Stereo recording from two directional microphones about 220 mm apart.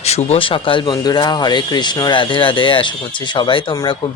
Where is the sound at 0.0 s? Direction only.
30° left (ahead or behind).